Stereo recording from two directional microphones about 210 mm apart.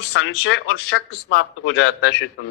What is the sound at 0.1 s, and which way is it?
Speech, 55° left (ahead or behind).